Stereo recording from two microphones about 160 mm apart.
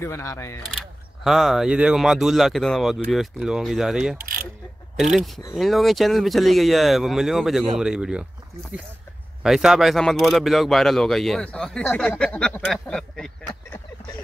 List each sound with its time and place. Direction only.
0.0 s speech: 15° left (ahead or behind)
0.7 s speech: centre (ahead or behind)
9.4 s speech: 5° right (ahead or behind)